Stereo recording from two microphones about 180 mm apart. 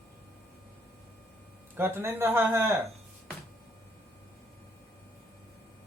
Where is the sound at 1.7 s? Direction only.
10° right (ahead or behind).